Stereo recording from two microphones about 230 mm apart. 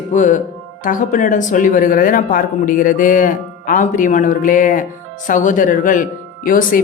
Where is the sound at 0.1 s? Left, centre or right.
Left.